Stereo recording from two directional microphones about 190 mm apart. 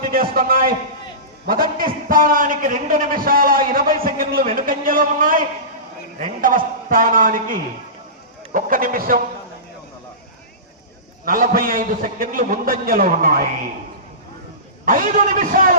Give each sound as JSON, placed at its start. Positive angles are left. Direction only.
{"t": 0.1, "sound": "a man's voice", "side_deg": -50}
{"t": 11.3, "sound": "a man's voice", "side_deg": -45}
{"t": 14.8, "sound": "a man's voice", "side_deg": -45}